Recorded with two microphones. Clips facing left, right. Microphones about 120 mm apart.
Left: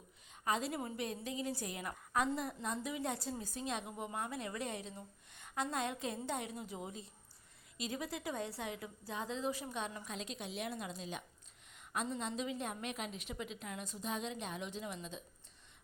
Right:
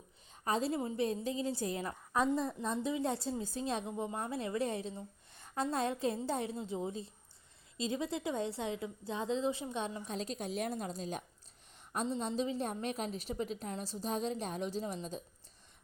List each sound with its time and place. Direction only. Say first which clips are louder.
0.4 s a woman's voice: right 4 dB; 30° right (ahead or behind)